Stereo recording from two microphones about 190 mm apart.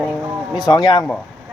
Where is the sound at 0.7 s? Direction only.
20° left (ahead or behind).